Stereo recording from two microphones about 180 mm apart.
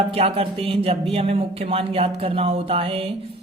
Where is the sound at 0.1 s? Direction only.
35° right (ahead or behind).